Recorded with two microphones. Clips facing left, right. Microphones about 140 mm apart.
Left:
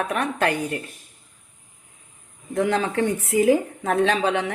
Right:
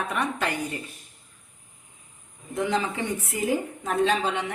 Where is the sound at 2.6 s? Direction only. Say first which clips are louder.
Left 5 dB; 65° left (ahead or behind).